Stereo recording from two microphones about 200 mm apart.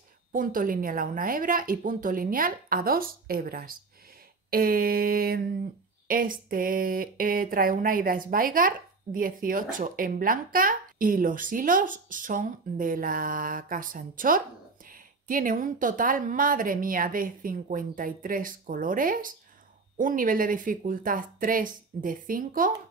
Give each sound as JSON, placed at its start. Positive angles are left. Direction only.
{"t": 0.3, "sound": "speech", "side_deg": -45}